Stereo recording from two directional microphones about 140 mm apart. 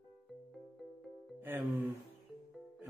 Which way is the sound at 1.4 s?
15° right (ahead or behind).